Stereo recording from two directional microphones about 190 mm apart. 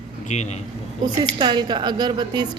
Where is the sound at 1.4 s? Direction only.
25° right (ahead or behind).